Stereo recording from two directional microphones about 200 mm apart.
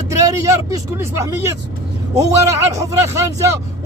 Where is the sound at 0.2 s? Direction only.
15° right (ahead or behind).